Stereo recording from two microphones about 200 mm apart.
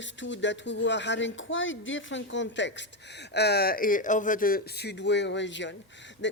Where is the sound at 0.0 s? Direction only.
65° left (ahead or behind).